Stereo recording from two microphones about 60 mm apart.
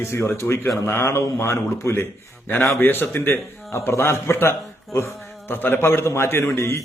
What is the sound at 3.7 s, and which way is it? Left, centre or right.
A man's voice, left.